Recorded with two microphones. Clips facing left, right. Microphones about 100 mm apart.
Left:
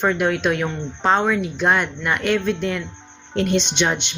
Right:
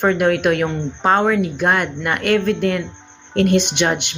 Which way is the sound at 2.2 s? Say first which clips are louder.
Right 5 dB; 55° right (ahead or behind).